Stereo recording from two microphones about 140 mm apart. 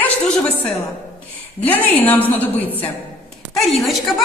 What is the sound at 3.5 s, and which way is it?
Speech, centre (ahead or behind).